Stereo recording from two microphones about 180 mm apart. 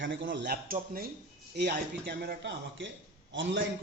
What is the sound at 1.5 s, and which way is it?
A man's voice, 65° right (ahead or behind).